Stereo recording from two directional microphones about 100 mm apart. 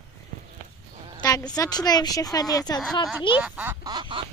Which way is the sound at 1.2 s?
40° left (ahead or behind).